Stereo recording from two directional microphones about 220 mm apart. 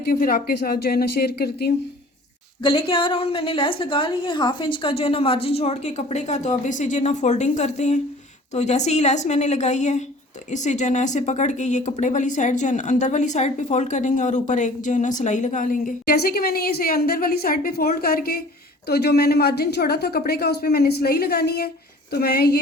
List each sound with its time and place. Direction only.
0.0 s a woman's voice: 45° left (ahead or behind)
2.6 s a woman's voice: 25° left (ahead or behind); by 22.5 s 45° left (ahead or behind)